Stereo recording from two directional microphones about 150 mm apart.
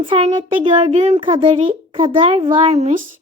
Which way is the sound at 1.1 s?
35° right (ahead or behind).